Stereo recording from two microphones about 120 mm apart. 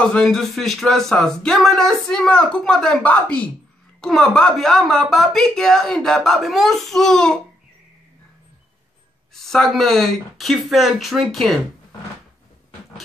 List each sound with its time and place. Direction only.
0.0 s speech: 5° left (ahead or behind)
9.3 s speech: centre (ahead or behind)